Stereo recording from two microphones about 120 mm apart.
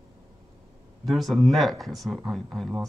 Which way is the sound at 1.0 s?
Centre (ahead or behind).